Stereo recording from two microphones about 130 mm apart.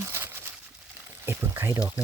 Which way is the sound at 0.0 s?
20° right (ahead or behind).